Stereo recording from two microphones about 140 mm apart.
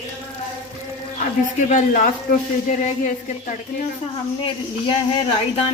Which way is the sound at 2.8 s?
60° left (ahead or behind).